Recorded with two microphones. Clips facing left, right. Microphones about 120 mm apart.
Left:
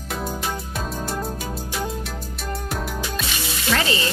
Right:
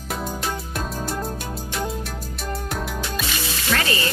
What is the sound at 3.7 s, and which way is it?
Water tap, 20° left (ahead or behind).